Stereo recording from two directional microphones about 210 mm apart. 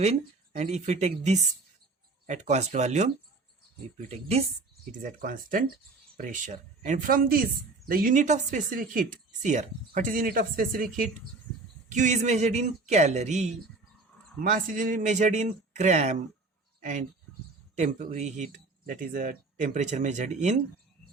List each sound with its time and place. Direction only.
0.0 s speech: 30° right (ahead or behind)
11.9 s speech: 35° right (ahead or behind)